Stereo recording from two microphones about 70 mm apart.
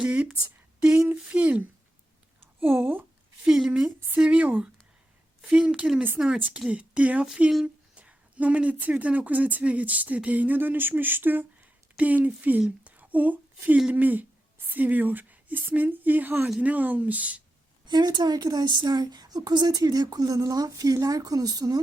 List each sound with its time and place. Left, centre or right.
0.0 s speech: centre
0.8 s a sound: centre
1.2 s speech: centre
2.6 s a woman's voice: right
3.4 s a woman's voice: centre
3.7 s a woman's voice: centre
12.8 s a sound: right
13.9 s speech: right
17.8 s a woman's voice: right